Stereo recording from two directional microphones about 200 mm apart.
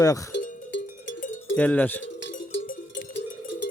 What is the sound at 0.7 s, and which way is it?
Cowbell, 65° left (ahead or behind).